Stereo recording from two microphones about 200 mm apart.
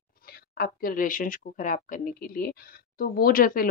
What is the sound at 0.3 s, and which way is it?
Speech, 45° left (ahead or behind).